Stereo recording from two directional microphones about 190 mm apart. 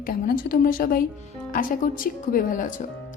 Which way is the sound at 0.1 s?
50° left (ahead or behind).